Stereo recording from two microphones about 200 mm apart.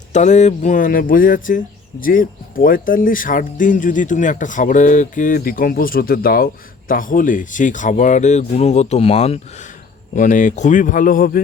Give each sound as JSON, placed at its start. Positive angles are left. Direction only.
{"t": 0.1, "sound": "speech", "side_deg": 35}